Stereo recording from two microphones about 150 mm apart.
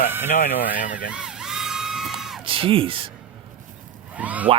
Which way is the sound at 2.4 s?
35° right (ahead or behind).